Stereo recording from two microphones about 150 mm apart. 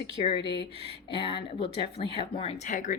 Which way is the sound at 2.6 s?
55° left (ahead or behind).